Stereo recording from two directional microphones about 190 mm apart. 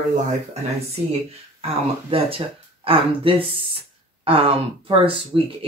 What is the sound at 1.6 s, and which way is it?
Speech, 30° right (ahead or behind).